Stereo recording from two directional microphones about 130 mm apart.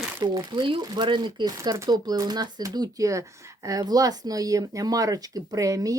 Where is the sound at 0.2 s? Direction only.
35° right (ahead or behind).